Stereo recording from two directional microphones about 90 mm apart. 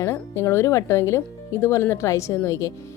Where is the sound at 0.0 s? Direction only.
30° left (ahead or behind).